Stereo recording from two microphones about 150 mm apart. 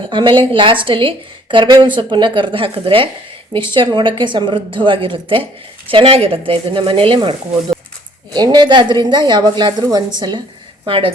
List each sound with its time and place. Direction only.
0.1 s a woman's voice: 35° right (ahead or behind)